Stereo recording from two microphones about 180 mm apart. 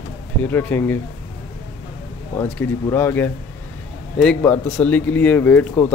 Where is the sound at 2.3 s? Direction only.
10° left (ahead or behind).